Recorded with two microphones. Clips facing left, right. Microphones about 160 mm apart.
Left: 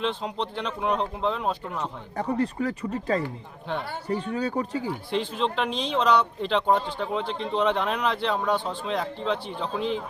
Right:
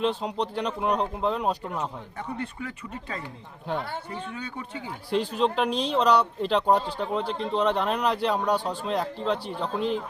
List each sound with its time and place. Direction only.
0.2 s speech: centre (ahead or behind)
2.1 s speech: 35° left (ahead or behind)
5.1 s speech: centre (ahead or behind)